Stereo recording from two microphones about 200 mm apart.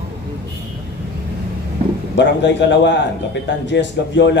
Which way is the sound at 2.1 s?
60° left (ahead or behind).